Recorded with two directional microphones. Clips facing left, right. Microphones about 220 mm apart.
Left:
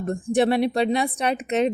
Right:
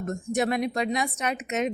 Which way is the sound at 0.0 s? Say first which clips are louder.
Left 6 dB; 30° left (ahead or behind).